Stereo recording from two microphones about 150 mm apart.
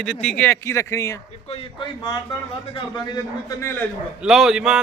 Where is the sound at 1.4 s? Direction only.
40° left (ahead or behind).